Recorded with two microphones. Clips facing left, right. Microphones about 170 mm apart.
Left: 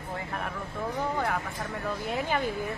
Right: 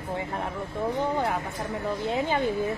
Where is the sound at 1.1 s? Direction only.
20° right (ahead or behind).